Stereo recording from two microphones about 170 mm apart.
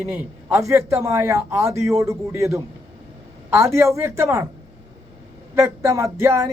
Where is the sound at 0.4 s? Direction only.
15° right (ahead or behind).